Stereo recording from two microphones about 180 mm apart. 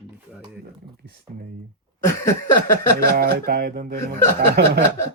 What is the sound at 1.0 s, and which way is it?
Speech, 60° right (ahead or behind).